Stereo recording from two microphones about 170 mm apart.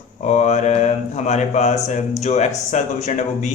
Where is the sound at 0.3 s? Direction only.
45° left (ahead or behind).